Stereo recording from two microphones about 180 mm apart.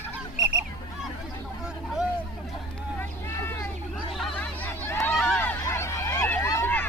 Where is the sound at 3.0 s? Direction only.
15° left (ahead or behind).